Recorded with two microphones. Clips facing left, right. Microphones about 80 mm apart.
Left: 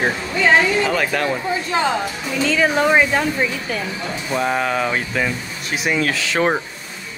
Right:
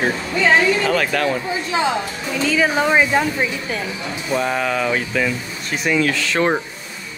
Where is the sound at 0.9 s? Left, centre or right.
Centre.